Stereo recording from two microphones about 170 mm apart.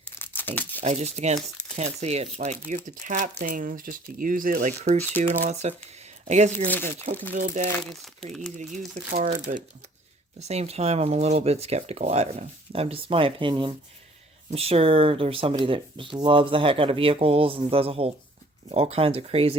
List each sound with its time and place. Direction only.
0.0 s tearing: 10° left (ahead or behind)
0.8 s speech: 40° right (ahead or behind)
6.7 s speech: 10° left (ahead or behind)
7.3 s speech: 45° right (ahead or behind)
7.7 s speech: 5° left (ahead or behind)
9.2 s speech: 45° right (ahead or behind)